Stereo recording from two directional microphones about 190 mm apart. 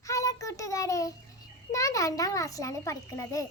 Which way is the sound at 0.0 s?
15° left (ahead or behind).